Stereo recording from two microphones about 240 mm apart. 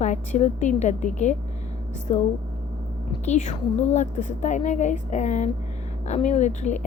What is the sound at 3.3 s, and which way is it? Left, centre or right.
A woman's voice, left.